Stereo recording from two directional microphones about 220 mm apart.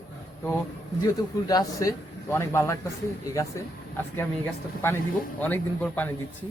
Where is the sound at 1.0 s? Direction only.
15° left (ahead or behind).